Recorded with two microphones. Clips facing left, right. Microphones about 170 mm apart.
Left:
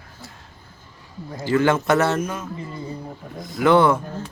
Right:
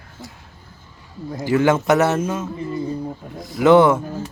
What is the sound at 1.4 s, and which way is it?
A man's voice, 15° right (ahead or behind).